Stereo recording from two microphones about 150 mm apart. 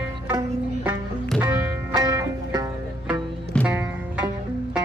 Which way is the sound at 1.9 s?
25° right (ahead or behind).